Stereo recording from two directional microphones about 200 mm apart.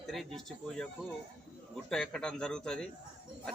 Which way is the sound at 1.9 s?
5° left (ahead or behind).